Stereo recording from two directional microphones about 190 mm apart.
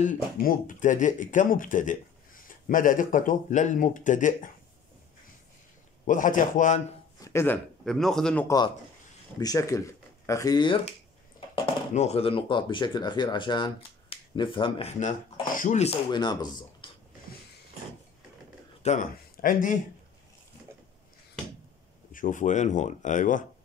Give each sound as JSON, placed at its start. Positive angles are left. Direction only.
{"t": 0.0, "sound": "speech", "side_deg": 45}
{"t": 6.0, "sound": "speech", "side_deg": 45}
{"t": 7.2, "sound": "a man's voice", "side_deg": 15}
{"t": 8.5, "sound": "speech", "side_deg": 20}
{"t": 16.1, "sound": "speech", "side_deg": 20}
{"t": 18.8, "sound": "speech", "side_deg": 40}
{"t": 22.1, "sound": "speech", "side_deg": 45}